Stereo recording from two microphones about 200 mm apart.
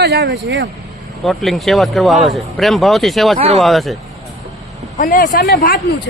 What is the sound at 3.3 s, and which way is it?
Speech, 30° right (ahead or behind).